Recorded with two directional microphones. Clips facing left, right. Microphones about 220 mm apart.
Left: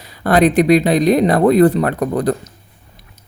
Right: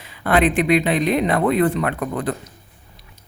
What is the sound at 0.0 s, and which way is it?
Speech, 40° left (ahead or behind).